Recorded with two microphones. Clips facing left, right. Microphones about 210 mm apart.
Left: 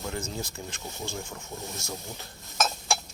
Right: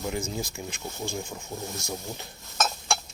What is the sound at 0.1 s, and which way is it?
Speech, 10° right (ahead or behind).